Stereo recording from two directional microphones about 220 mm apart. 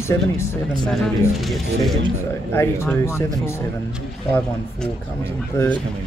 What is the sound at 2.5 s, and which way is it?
Speech, 10° left (ahead or behind).